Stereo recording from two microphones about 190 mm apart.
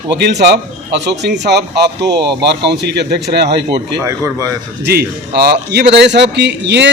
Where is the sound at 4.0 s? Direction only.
15° right (ahead or behind).